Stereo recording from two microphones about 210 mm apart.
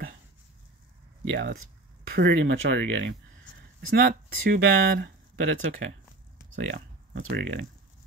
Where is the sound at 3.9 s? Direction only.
45° right (ahead or behind); by 5.9 s 65° right (ahead or behind).